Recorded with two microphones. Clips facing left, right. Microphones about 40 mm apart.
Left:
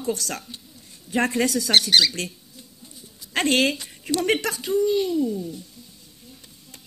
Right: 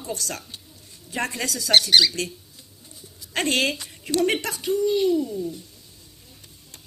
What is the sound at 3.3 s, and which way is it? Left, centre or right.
A woman's voice, left.